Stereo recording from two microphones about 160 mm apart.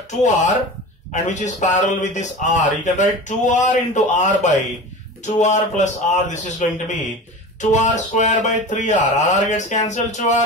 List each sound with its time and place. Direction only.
0.2 s speech: 50° left (ahead or behind)